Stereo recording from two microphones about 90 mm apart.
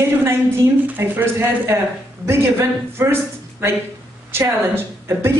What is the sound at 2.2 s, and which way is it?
Speech, 30° right (ahead or behind).